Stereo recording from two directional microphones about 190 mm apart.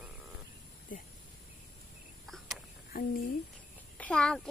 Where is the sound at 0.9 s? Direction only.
45° left (ahead or behind).